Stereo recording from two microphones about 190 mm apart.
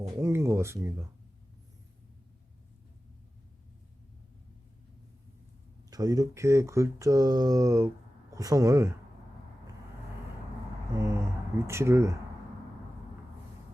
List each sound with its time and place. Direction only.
0.2 s speech: 15° right (ahead or behind)
5.9 s speech: 20° right (ahead or behind)
10.9 s a sound: 15° right (ahead or behind)